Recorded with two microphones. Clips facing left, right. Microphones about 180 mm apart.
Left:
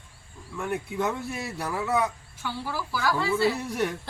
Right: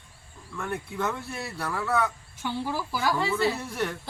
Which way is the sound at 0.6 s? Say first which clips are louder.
Left 2 dB; 15° left (ahead or behind).